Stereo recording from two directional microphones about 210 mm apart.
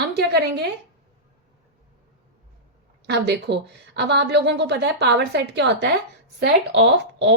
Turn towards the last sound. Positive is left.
turn(degrees=-55)  # may be behind; listen again after turning